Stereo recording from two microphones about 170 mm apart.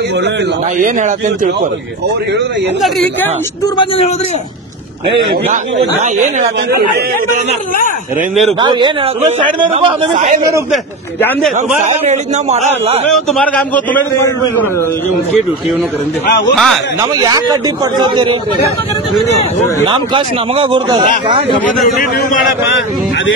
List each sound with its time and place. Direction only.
0.7 s speech: 50° right (ahead or behind)
3.6 s a man's voice: 30° left (ahead or behind)
8.5 s a man's voice: 25° right (ahead or behind)
10.1 s speech: 50° right (ahead or behind)
11.8 s a man's voice: 40° right (ahead or behind)
13.1 s a man's voice: 5° left (ahead or behind)
16.5 s speech: centre (ahead or behind)
17.0 s a man's voice: 25° right (ahead or behind)
19.9 s a man's voice: 30° right (ahead or behind)